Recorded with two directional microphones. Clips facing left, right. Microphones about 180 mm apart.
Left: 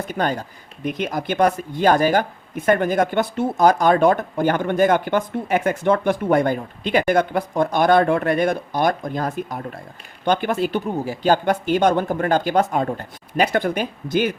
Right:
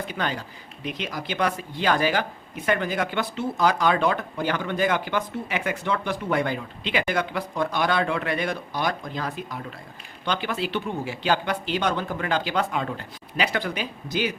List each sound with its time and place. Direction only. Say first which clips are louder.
0.1 s speech: left 6 dB; 45° left (ahead or behind)